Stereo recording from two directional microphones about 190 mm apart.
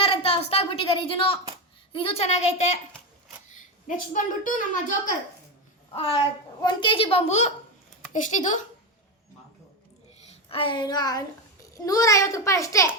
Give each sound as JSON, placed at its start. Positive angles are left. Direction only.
{"t": 0.0, "sound": "a sound", "side_deg": 30}
{"t": 1.9, "sound": "a woman's voice", "side_deg": 30}
{"t": 3.8, "sound": "a child's voice", "side_deg": 45}
{"t": 5.9, "sound": "a child's voice", "side_deg": 30}
{"t": 10.5, "sound": "a child's voice", "side_deg": 25}